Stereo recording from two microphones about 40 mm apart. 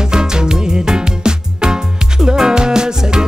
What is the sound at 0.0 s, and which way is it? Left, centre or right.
Music, centre.